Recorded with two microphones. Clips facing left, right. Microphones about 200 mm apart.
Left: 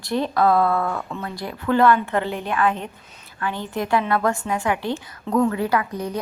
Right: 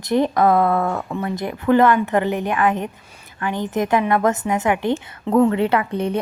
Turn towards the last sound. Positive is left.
turn(degrees=-25)  # may be behind; listen again after turning